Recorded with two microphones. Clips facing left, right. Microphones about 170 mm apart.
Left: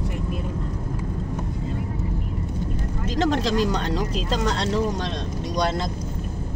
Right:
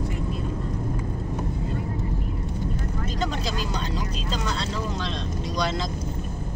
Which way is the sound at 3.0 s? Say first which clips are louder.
Left 8 dB; 90° left.